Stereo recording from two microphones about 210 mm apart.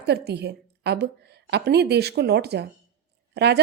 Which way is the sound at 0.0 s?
50° right (ahead or behind).